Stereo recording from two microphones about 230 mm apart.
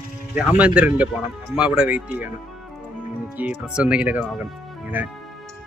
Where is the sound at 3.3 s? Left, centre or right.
Centre.